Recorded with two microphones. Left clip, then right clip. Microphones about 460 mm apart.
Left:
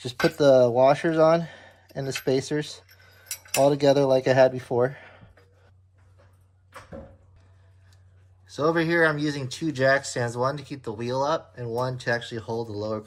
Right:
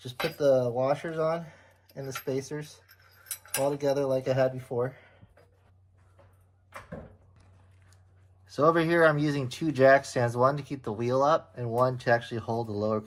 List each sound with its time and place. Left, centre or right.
0.0 s speech: centre
8.4 s speech: centre